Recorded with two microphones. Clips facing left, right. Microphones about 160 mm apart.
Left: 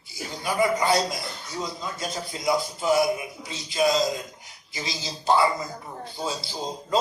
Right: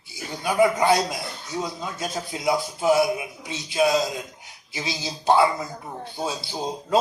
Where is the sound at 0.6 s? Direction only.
65° right (ahead or behind).